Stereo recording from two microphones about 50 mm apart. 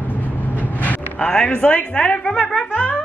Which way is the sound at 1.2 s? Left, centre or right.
Centre.